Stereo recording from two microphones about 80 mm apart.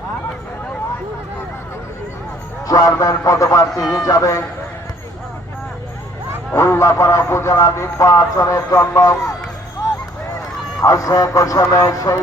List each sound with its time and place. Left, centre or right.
2.6 s a man's voice: left
6.5 s a man's voice: left
10.8 s a man's voice: left